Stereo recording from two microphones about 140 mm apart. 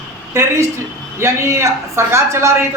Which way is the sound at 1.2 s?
20° right (ahead or behind).